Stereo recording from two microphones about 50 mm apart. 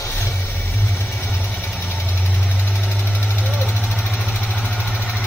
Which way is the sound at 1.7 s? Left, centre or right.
Left.